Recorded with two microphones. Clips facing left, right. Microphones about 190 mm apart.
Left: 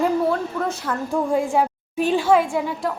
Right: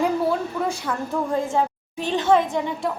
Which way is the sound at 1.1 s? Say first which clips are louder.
Left 3 dB; 15° left (ahead or behind).